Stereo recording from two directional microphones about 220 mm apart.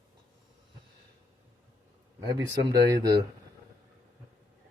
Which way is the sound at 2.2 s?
15° right (ahead or behind).